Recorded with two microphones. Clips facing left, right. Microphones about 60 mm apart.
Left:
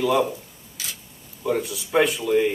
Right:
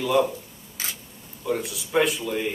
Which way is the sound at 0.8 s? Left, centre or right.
Right.